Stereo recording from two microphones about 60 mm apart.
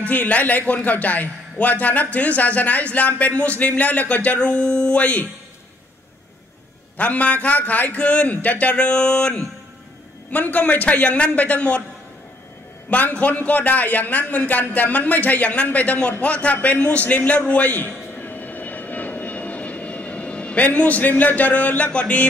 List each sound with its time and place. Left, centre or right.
0.0 s a man's voice: left
7.0 s a man's voice: left
10.3 s a man's voice: left
12.9 s a man's voice: left
16.5 s a sound: left